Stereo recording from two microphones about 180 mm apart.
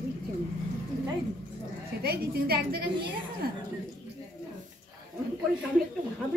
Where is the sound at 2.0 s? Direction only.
60° right (ahead or behind).